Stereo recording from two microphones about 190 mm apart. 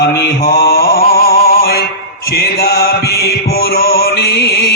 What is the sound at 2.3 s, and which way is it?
Music, 55° left (ahead or behind).